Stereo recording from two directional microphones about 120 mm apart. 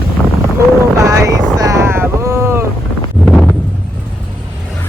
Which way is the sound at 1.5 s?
25° right (ahead or behind).